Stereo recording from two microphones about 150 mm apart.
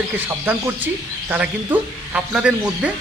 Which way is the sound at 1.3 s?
10° right (ahead or behind).